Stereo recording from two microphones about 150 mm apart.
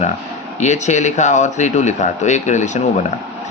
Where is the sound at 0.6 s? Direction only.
50° left (ahead or behind).